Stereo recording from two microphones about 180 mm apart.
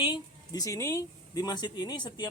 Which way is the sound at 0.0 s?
20° left (ahead or behind).